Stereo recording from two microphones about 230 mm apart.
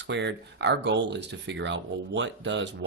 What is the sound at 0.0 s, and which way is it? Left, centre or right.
Speech, right.